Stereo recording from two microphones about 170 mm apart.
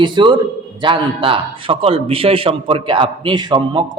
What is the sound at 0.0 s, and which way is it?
A man's voice, 30° right (ahead or behind).